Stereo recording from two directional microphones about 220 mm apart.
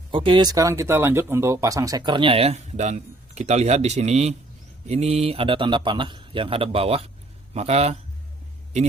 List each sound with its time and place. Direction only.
0.1 s speech: 20° right (ahead or behind)